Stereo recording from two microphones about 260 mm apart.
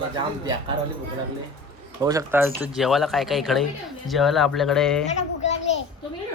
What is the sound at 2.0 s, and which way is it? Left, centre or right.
A man's voice, centre.